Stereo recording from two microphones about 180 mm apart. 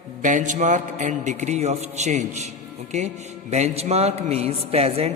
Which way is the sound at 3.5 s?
35° right (ahead or behind).